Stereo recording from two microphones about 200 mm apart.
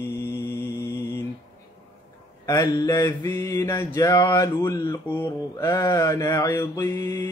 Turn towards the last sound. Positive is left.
turn(degrees=15)  # may be behind; listen again after turning